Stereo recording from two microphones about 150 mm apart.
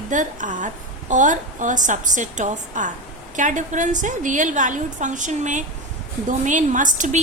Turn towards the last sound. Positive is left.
turn(degrees=-60)  # may be behind; listen again after turning